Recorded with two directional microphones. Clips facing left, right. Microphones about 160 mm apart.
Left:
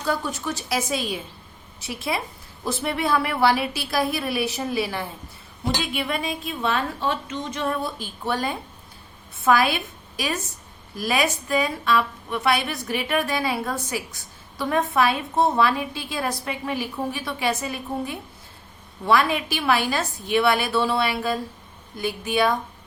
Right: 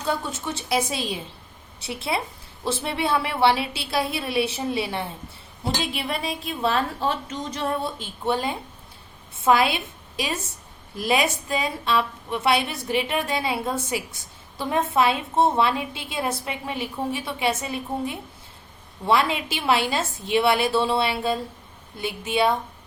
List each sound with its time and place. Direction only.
0.1 s a woman's voice: 25° right (ahead or behind)